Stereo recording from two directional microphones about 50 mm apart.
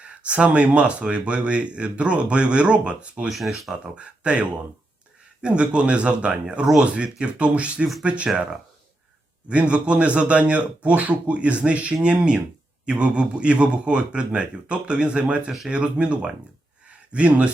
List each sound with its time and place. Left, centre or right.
0.0 s speech: right
3.2 s speech: centre
3.9 s speech: right
9.5 s speech: right